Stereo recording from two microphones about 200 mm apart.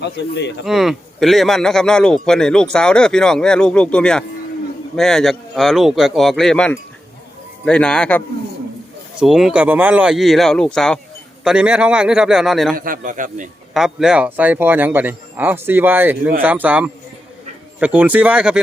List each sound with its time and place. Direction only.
0.0 s speech: 60° left (ahead or behind)
0.6 s speech: centre (ahead or behind)
12.7 s a man's voice: 45° right (ahead or behind)
13.7 s a man's voice: 5° right (ahead or behind)